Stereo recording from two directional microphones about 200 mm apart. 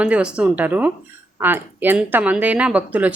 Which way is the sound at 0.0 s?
5° right (ahead or behind).